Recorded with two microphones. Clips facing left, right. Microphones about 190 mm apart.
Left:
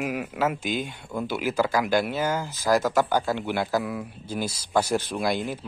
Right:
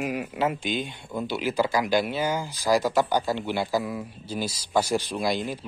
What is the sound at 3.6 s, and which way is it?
Speech, centre (ahead or behind).